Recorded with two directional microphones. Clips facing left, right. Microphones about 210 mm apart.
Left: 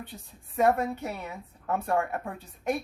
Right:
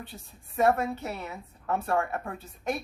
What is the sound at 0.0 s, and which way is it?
A woman's voice, 15° left (ahead or behind).